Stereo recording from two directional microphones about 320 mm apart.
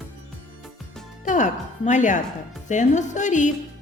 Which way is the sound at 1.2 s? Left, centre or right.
Left.